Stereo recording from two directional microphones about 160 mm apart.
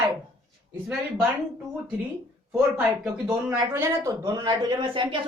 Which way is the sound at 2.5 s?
10° right (ahead or behind).